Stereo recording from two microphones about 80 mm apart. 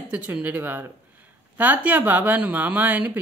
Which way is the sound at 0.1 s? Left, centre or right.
Centre.